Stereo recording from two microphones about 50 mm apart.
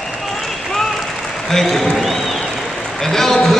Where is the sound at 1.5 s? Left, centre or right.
Centre.